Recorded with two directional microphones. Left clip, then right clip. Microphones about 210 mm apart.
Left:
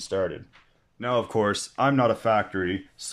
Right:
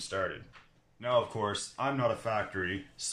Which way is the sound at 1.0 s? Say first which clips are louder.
Left 5 dB; 50° left (ahead or behind).